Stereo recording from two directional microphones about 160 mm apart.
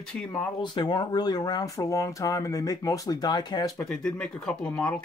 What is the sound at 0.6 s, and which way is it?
Speech, 30° left (ahead or behind).